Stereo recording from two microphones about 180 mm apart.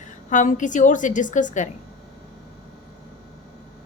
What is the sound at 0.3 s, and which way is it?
A woman's voice, 45° left (ahead or behind).